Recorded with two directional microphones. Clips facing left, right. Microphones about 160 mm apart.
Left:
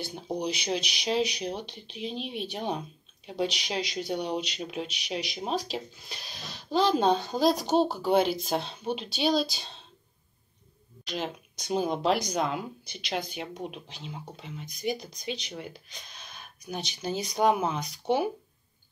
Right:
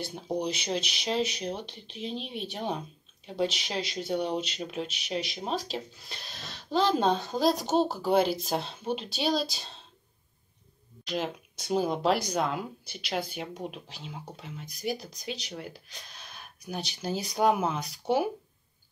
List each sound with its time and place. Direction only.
0.0 s speech: centre (ahead or behind)
11.1 s speech: 5° right (ahead or behind)